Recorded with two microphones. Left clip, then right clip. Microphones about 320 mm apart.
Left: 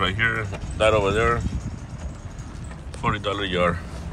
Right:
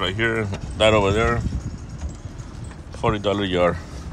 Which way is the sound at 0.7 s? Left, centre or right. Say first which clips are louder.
Right 2 dB; right.